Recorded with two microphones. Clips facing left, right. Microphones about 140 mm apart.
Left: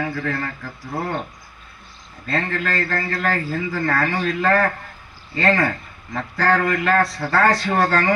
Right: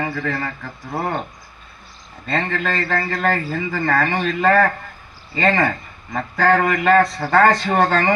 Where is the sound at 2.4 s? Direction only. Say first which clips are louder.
Right 1 dB; 70° right (ahead or behind).